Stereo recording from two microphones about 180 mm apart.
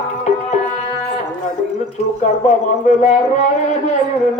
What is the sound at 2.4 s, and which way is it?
A man's voice, 40° left (ahead or behind).